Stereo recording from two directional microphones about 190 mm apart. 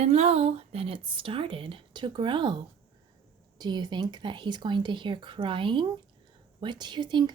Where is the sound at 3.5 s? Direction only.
20° right (ahead or behind).